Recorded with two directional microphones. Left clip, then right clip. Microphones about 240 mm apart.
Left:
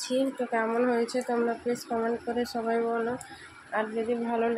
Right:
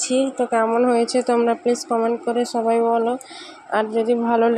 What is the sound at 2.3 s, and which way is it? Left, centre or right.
Speech, right.